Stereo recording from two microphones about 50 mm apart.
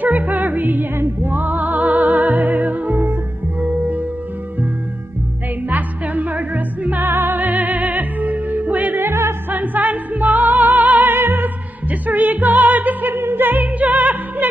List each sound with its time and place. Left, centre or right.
0.0 s music: right
0.9 s music: right
1.3 s music: right
3.6 s music: right
5.7 s music: right
7.0 s music: right
13.1 s opera: right